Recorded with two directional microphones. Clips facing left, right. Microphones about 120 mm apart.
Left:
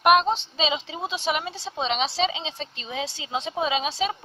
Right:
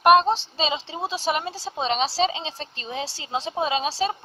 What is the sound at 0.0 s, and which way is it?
A woman's voice, 35° right (ahead or behind).